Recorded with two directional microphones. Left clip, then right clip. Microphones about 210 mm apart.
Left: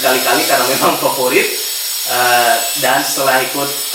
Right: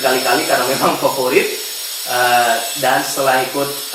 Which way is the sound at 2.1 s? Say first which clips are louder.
Left 1 dB; 10° right (ahead or behind).